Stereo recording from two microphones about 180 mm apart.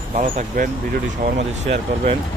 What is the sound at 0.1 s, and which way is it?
Speech, 45° right (ahead or behind).